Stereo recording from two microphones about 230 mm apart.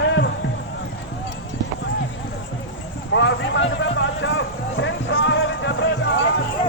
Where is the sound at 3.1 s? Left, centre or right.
Left.